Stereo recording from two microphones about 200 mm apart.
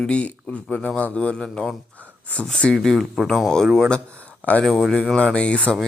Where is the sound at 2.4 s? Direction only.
5° left (ahead or behind).